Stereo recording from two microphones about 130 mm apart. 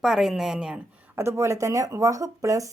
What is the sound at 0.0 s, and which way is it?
Speech, centre (ahead or behind).